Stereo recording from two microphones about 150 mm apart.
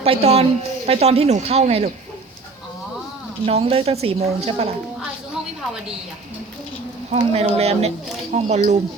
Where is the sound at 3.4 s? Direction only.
40° right (ahead or behind).